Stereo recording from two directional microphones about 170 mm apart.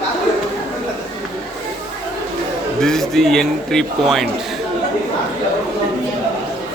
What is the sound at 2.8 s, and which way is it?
A man's voice, centre (ahead or behind).